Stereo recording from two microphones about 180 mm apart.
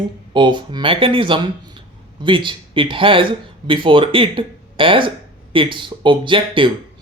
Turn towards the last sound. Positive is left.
turn(degrees=-25)  # may be behind; listen again after turning